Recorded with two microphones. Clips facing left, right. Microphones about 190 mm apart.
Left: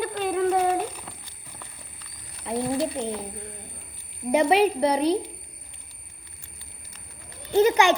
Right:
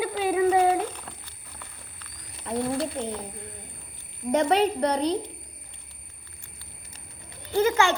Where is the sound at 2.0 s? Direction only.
15° left (ahead or behind).